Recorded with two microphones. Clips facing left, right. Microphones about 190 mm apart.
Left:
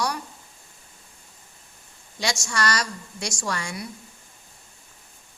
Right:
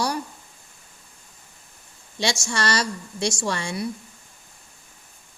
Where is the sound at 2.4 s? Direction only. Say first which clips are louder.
Right 2 dB; 25° right (ahead or behind).